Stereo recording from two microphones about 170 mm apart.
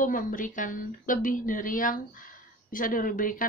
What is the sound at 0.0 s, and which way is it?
Speech, 50° left (ahead or behind).